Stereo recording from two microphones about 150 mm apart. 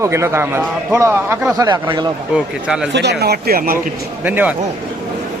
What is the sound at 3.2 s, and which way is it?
Speech, 90° right.